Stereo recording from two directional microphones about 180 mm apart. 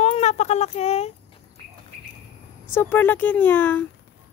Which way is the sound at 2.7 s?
10° left (ahead or behind).